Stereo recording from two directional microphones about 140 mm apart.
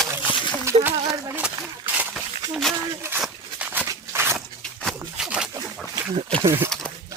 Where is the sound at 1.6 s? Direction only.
10° right (ahead or behind).